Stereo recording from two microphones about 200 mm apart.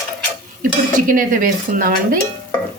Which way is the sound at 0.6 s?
40° right (ahead or behind).